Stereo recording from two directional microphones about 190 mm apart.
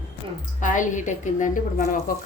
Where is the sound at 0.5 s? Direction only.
40° left (ahead or behind).